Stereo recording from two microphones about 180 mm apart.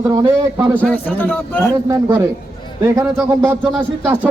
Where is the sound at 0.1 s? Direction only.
20° right (ahead or behind).